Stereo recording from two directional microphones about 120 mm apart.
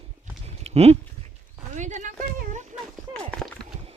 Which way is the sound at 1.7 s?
90° right.